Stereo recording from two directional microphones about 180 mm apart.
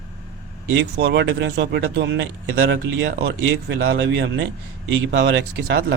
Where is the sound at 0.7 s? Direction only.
65° right (ahead or behind).